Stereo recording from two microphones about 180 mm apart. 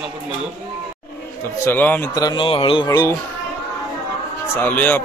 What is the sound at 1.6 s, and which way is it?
Speech, 10° left (ahead or behind).